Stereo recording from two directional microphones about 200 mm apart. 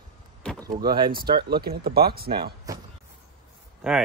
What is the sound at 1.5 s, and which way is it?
Speech, 50° right (ahead or behind).